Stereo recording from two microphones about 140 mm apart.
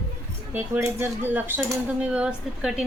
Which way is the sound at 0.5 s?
15° right (ahead or behind).